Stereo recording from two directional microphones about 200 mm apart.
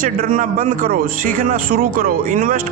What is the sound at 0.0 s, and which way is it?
A man's voice, 40° right (ahead or behind).